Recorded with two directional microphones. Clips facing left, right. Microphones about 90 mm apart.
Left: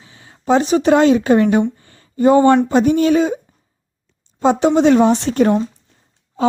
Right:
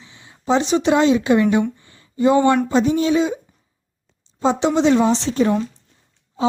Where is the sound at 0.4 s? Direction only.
45° left (ahead or behind).